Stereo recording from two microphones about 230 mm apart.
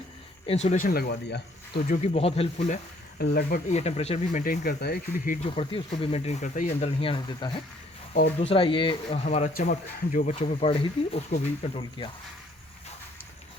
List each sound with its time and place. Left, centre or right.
0.4 s speech: left
2.0 s speech: left
3.2 s speech: left; by 12.1 s centre